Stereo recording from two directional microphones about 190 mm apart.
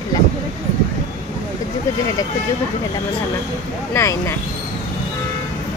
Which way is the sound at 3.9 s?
15° left (ahead or behind).